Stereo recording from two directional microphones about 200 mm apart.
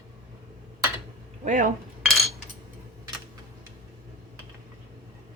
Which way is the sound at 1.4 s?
40° right (ahead or behind).